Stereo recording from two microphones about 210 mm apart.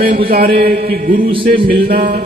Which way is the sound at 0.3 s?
45° right (ahead or behind).